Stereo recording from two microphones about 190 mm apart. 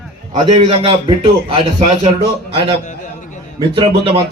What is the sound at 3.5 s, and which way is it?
Speech, 25° right (ahead or behind).